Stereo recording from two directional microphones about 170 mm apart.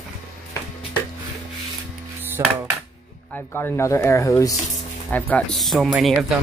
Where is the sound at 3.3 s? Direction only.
10° left (ahead or behind).